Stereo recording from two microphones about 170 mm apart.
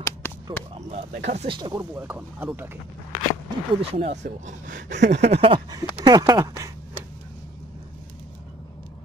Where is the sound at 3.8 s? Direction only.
35° right (ahead or behind).